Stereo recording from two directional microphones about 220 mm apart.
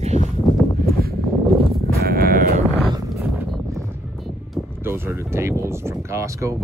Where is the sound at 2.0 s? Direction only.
45° right (ahead or behind).